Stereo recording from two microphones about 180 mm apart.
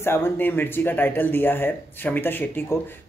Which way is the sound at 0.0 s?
15° left (ahead or behind).